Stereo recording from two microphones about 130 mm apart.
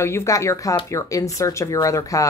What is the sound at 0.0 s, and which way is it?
Speech, 20° left (ahead or behind).